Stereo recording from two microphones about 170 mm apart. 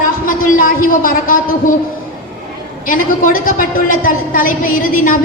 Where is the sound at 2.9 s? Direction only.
55° left (ahead or behind).